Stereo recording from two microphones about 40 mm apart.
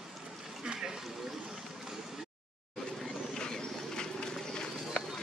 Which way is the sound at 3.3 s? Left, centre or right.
Centre.